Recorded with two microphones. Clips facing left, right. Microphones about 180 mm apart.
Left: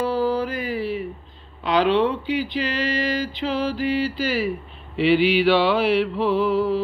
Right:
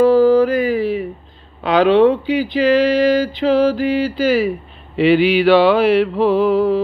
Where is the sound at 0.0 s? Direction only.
50° right (ahead or behind).